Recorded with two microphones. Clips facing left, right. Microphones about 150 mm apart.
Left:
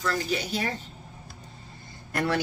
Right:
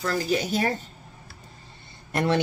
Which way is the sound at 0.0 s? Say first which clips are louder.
Right 3 dB; 40° right (ahead or behind).